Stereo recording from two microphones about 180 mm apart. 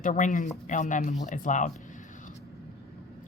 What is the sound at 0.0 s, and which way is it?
A woman's voice, 45° left (ahead or behind).